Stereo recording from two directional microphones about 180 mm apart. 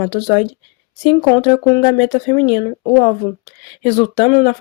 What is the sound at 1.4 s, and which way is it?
Speech, 30° left (ahead or behind).